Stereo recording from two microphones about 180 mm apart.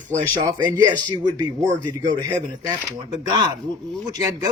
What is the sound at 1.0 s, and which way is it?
Speech, 25° right (ahead or behind).